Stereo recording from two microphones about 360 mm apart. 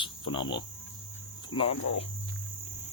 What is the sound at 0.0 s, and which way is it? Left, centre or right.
Cricket, centre.